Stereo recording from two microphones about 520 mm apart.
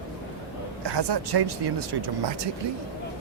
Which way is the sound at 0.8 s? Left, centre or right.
Right.